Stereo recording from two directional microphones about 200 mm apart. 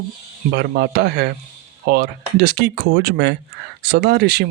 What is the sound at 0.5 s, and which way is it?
Speech, 55° right (ahead or behind).